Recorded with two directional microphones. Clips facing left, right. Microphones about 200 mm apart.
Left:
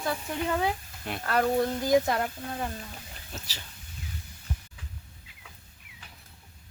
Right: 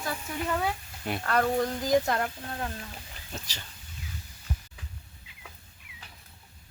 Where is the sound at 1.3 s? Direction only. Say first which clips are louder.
Left 1 dB; 5° left (ahead or behind).